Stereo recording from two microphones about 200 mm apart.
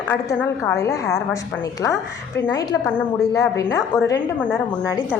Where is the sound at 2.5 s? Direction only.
20° left (ahead or behind).